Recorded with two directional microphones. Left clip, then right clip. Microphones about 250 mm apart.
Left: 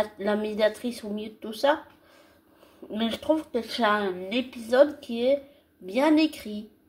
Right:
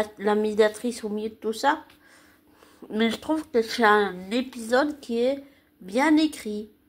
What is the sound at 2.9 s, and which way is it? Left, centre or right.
Speech, right.